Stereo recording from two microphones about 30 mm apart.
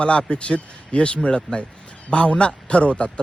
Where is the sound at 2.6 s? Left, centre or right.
Left.